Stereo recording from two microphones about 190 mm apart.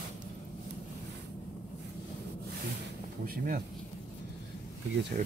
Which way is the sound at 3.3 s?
50° right (ahead or behind).